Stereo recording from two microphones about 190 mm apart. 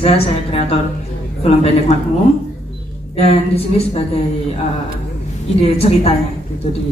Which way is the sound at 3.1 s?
30° left (ahead or behind).